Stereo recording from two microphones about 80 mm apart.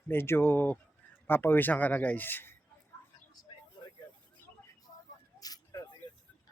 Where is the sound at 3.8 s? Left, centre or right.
Left.